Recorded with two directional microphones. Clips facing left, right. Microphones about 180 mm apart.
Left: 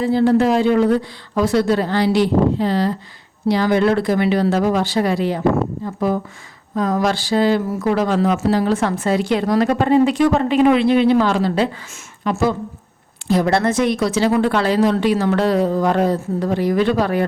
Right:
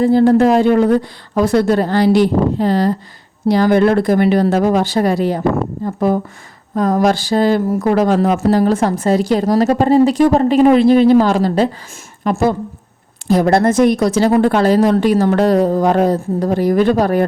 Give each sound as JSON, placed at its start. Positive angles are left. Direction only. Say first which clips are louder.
{"t": 0.0, "sound": "a woman's voice", "louder": "right 4 dB", "side_deg": -50}
{"t": 12.2, "sound": "a woman's voice", "louder": "right 3 dB", "side_deg": -55}